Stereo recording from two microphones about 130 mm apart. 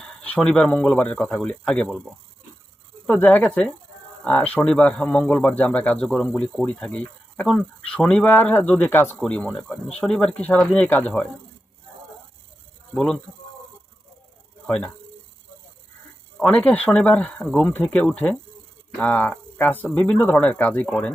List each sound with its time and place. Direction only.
0.0 s a man's voice: 10° left (ahead or behind)
3.1 s a man's voice: 10° left (ahead or behind)
12.9 s speech: 5° left (ahead or behind)
16.4 s a man's voice: 10° left (ahead or behind)